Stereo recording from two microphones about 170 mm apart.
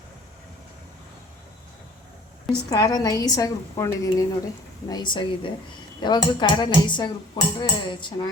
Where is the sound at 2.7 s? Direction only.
20° left (ahead or behind).